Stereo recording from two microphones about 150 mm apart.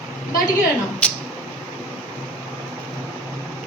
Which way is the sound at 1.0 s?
10° left (ahead or behind).